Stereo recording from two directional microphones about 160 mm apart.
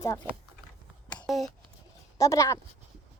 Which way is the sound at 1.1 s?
Centre (ahead or behind).